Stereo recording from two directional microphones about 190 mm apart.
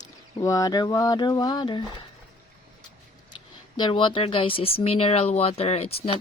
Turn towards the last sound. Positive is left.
turn(degrees=30)  # may be behind; listen again after turning